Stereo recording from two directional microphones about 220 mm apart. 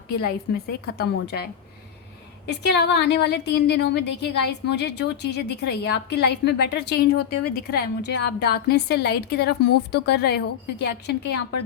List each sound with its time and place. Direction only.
0.1 s a woman's voice: 45° left (ahead or behind)
2.5 s a woman's voice: 50° left (ahead or behind)